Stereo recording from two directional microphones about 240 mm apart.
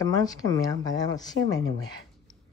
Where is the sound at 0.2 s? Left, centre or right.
Centre.